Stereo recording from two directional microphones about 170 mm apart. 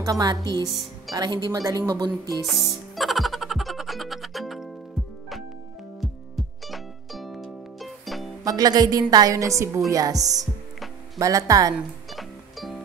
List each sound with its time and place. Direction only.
0.0 s speech: 25° right (ahead or behind)
0.7 s speech: centre (ahead or behind)
1.1 s speech: 25° right (ahead or behind)
2.4 s music: centre (ahead or behind)
5.9 s music: centre (ahead or behind)
8.5 s speech: 20° right (ahead or behind)
12.1 s music: centre (ahead or behind)